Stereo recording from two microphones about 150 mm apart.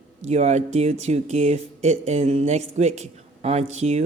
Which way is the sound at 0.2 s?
45° right (ahead or behind).